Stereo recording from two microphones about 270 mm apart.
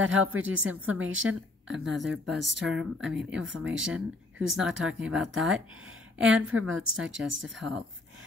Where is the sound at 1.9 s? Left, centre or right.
Centre.